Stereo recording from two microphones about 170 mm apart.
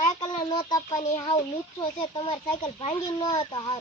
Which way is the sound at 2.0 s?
30° left (ahead or behind).